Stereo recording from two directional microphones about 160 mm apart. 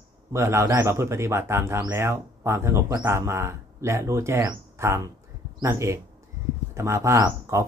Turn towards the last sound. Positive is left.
turn(degrees=-15)  # may be behind; listen again after turning